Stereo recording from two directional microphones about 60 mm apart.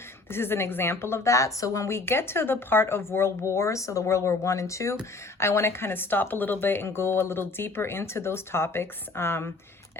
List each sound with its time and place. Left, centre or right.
0.3 s a woman's voice: left
5.4 s a woman's voice: left